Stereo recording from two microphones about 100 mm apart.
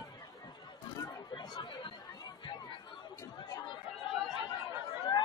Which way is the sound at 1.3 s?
50° left (ahead or behind).